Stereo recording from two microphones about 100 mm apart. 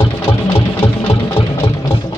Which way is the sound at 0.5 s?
70° left (ahead or behind).